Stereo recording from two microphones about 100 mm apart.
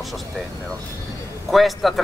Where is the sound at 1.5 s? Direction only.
Centre (ahead or behind).